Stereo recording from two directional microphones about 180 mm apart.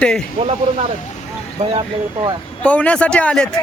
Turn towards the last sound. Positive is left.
turn(degrees=5)  # may be behind; listen again after turning